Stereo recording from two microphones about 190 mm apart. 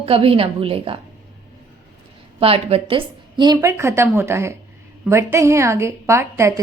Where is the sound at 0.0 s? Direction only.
30° right (ahead or behind).